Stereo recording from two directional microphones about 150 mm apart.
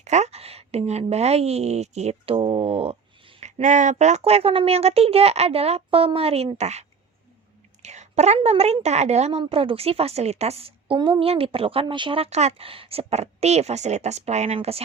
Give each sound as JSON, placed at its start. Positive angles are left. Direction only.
{"t": 0.0, "sound": "speech", "side_deg": -50}
{"t": 3.4, "sound": "a woman's voice", "side_deg": -55}